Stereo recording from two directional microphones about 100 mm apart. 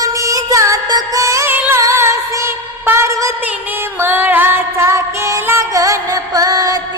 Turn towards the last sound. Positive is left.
turn(degrees=-40)  # may be behind; listen again after turning